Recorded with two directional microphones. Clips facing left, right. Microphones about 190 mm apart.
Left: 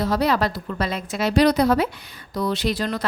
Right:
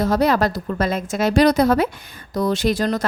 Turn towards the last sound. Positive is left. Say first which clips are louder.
# right 4 dB
turn(degrees=-45)  # may be behind; listen again after turning